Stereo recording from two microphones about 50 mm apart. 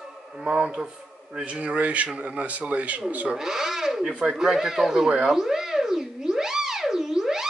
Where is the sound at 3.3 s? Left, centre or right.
Centre.